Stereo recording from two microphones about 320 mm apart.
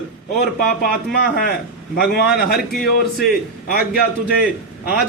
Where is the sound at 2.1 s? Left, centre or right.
Left.